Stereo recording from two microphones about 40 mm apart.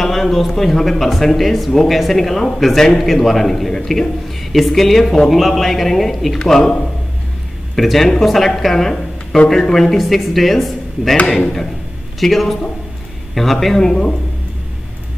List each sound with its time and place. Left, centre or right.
0.0 s a man's voice: centre
7.7 s speech: centre
9.9 s a man's voice: centre
12.2 s a man's voice: centre
13.7 s speech: centre